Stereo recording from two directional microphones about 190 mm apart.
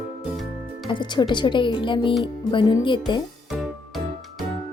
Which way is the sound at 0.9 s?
25° left (ahead or behind).